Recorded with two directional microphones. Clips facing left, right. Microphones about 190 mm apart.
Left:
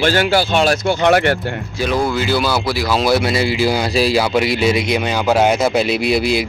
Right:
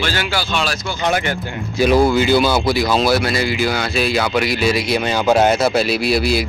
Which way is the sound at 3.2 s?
25° left (ahead or behind).